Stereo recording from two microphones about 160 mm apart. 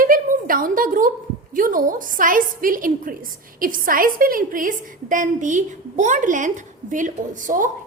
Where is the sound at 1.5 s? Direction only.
55° right (ahead or behind).